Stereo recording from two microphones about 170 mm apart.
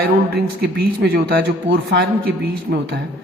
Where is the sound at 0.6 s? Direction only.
65° right (ahead or behind).